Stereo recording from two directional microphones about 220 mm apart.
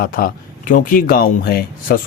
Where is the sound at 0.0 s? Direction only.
40° left (ahead or behind).